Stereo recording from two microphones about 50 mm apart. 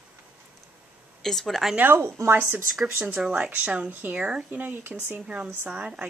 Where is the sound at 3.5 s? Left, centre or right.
Right.